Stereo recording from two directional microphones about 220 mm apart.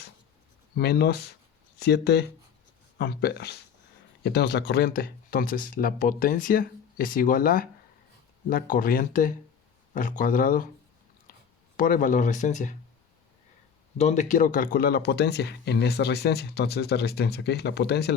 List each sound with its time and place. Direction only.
0.8 s speech: 45° left (ahead or behind)
11.8 s speech: 35° left (ahead or behind)
14.0 s speech: 30° left (ahead or behind); by 18.1 s 50° left (ahead or behind)